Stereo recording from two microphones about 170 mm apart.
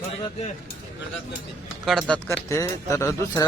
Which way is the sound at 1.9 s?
5° left (ahead or behind).